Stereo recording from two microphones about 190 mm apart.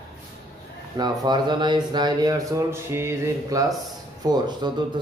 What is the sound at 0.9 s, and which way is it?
Speech, 20° right (ahead or behind).